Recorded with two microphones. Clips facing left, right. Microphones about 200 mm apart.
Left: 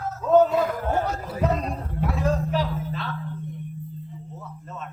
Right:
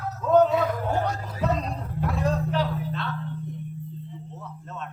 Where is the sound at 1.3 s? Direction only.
55° left (ahead or behind).